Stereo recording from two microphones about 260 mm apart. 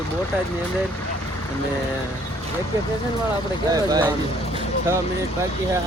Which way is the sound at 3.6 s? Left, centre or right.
Centre.